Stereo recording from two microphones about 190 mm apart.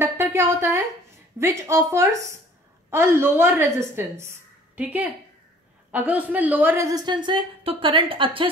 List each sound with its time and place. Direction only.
0.0 s a woman's voice: 15° right (ahead or behind)